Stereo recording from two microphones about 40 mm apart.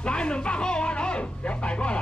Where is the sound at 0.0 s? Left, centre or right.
Left.